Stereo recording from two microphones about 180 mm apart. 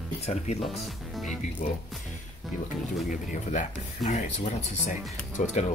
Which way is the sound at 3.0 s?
40° left (ahead or behind).